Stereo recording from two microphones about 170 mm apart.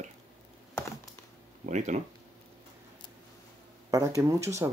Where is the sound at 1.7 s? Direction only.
45° right (ahead or behind).